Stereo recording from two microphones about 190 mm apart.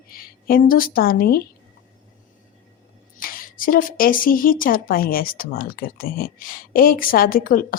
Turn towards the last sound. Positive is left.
turn(degrees=50)  # may be behind; listen again after turning